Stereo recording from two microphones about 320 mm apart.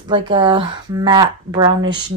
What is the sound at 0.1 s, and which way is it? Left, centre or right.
Speech, centre.